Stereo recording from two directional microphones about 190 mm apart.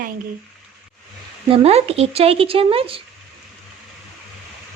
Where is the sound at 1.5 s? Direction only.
30° right (ahead or behind).